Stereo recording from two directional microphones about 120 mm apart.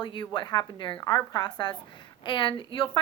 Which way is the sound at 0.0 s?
40° left (ahead or behind).